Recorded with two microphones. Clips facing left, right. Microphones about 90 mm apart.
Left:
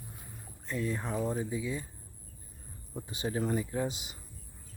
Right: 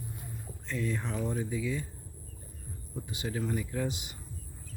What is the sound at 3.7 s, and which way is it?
Speech, 25° left (ahead or behind).